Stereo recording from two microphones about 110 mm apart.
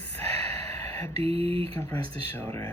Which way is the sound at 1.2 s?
65° right (ahead or behind).